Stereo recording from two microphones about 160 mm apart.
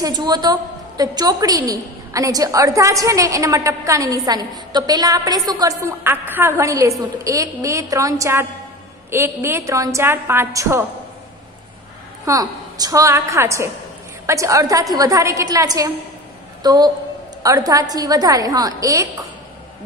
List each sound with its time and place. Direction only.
0.0 s a woman's voice: 25° right (ahead or behind)
12.3 s a woman's voice: 25° right (ahead or behind)